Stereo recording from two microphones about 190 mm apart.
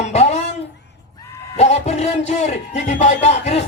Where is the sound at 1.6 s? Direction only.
35° left (ahead or behind).